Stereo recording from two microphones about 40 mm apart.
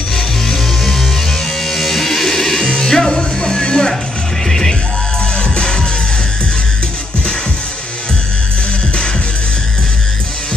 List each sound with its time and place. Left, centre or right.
0.5 s music: centre
5.4 s music: left